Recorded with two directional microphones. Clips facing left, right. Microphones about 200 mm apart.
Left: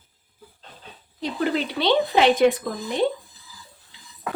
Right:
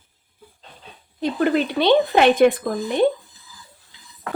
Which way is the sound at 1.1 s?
55° right (ahead or behind).